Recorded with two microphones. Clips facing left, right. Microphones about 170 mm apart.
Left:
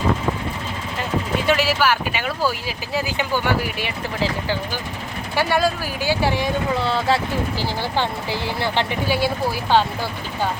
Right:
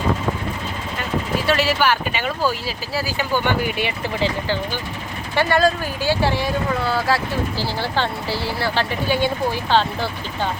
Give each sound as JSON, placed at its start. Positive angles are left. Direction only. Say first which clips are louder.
{"t": 1.5, "sound": "speech", "louder": "even", "side_deg": 10}
{"t": 3.4, "sound": "speech", "louder": "right 1 dB", "side_deg": 0}
{"t": 5.3, "sound": "speech", "louder": "right 2 dB", "side_deg": 10}
{"t": 6.7, "sound": "speech", "louder": "left 1 dB", "side_deg": 25}
{"t": 7.6, "sound": "speech", "louder": "even", "side_deg": 15}